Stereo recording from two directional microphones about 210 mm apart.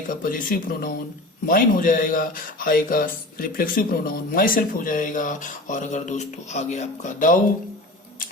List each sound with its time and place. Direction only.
0.1 s speech: 40° left (ahead or behind)